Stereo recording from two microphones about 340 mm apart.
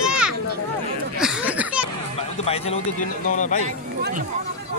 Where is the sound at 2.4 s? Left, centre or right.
Centre.